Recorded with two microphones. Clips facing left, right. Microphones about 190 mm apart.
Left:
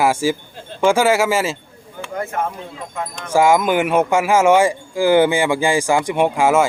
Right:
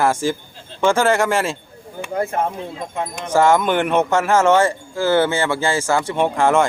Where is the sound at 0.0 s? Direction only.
10° left (ahead or behind).